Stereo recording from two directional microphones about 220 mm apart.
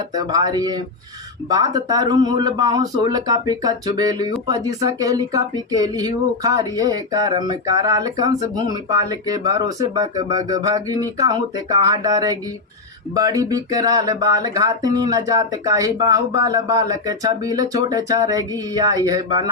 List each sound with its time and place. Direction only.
0.1 s speech: 15° right (ahead or behind)